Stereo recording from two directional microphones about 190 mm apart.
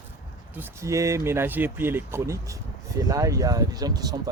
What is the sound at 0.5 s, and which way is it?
Speech, 15° right (ahead or behind).